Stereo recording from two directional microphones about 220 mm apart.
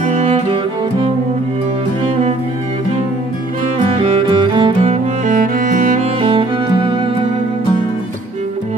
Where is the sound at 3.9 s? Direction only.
20° right (ahead or behind).